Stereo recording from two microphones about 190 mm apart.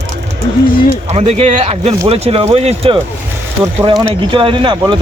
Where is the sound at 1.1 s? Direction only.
30° right (ahead or behind).